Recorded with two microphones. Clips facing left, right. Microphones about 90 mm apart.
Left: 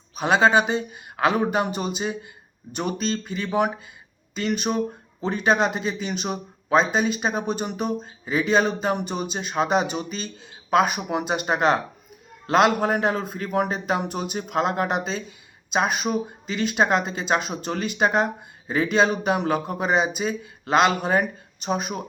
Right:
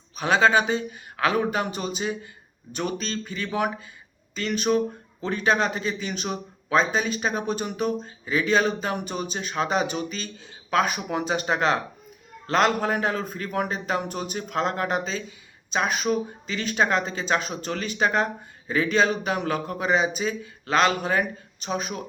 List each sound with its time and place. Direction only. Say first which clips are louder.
0.2 s speech: left 2 dB; 10° left (ahead or behind)